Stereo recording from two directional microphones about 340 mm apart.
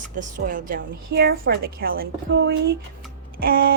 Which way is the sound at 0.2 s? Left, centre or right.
Right.